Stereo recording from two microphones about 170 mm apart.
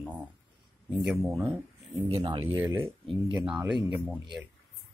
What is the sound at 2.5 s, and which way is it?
Speech, 15° right (ahead or behind).